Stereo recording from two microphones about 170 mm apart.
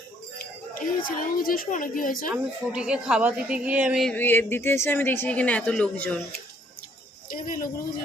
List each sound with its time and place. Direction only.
1.0 s a woman's voice: 55° left (ahead or behind)
2.3 s a woman's voice: 5° right (ahead or behind)
4.1 s speech: 10° left (ahead or behind)
7.3 s speech: 55° left (ahead or behind)